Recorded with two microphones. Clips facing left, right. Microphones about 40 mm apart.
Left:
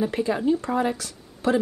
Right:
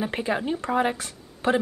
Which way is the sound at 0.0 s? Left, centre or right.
Right.